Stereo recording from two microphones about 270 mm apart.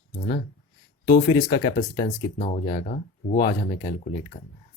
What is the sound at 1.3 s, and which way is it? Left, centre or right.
Speech, centre.